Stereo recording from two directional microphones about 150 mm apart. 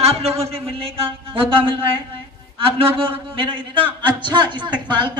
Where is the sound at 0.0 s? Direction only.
40° right (ahead or behind).